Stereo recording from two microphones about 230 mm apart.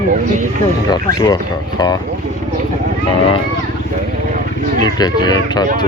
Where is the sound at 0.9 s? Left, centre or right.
Centre.